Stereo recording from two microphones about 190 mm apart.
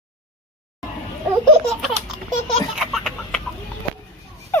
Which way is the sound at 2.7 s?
Centre (ahead or behind).